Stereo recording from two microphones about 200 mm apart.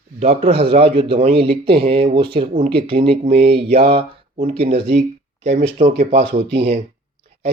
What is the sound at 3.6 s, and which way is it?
Speech, 30° right (ahead or behind).